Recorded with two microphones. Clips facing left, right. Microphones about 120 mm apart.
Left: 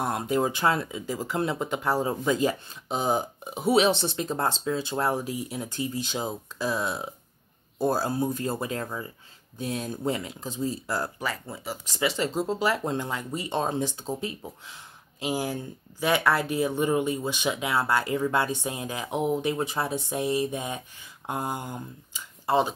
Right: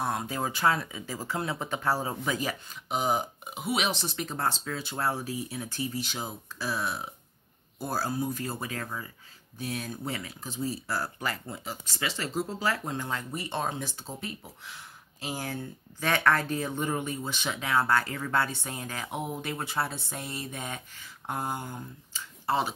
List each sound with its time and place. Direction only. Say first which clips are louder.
0.0 s speech: left 5 dB; 20° left (ahead or behind)
3.0 s speech: left 2 dB; 30° left (ahead or behind)
11.1 s speech: left 2 dB; centre (ahead or behind)
11.8 s speech: left 9 dB; 15° left (ahead or behind)